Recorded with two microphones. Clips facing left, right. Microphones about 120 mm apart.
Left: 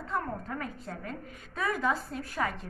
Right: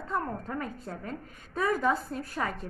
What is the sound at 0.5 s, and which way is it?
A woman's voice, 40° right (ahead or behind).